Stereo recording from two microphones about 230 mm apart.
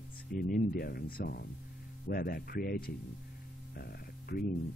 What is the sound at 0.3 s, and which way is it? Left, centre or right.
Speech, left.